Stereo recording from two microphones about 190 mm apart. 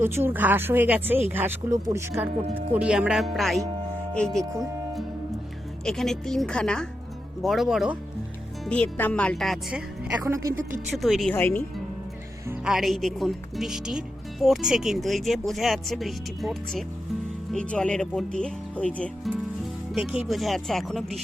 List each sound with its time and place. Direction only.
0.0 s speech: 10° right (ahead or behind)
2.4 s speech: 30° right (ahead or behind)
2.7 s speech: 5° right (ahead or behind)
5.8 s speech: 5° left (ahead or behind)
10.2 s speech: 15° right (ahead or behind)
10.9 s speech: centre (ahead or behind)
11.3 s speech: 10° left (ahead or behind)
12.5 s speech: 5° right (ahead or behind)
19.9 s speech: 5° right (ahead or behind)